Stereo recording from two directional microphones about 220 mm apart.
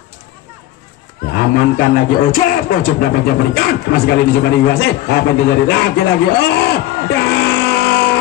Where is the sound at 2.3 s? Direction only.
40° left (ahead or behind).